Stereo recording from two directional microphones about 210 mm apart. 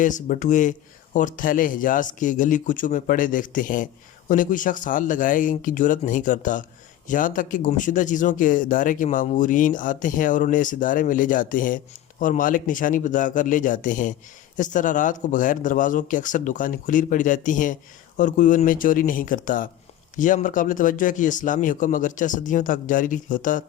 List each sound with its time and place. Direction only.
0.0 s speech: 35° left (ahead or behind)